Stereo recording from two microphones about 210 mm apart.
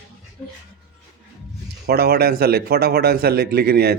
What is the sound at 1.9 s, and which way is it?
Speech, 50° right (ahead or behind).